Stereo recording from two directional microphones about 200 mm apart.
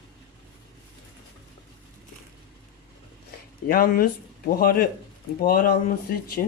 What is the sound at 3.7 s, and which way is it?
Speech, 45° left (ahead or behind).